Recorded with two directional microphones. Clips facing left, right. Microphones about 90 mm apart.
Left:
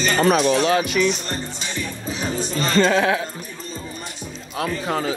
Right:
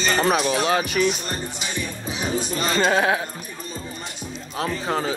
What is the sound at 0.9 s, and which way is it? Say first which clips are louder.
Speech: left 1 dB; 45° right (ahead or behind).